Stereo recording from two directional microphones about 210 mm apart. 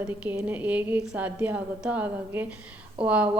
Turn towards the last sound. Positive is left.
turn(degrees=-5)  # may be behind; listen again after turning